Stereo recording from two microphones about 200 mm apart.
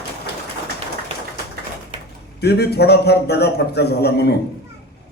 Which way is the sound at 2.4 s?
55° left (ahead or behind).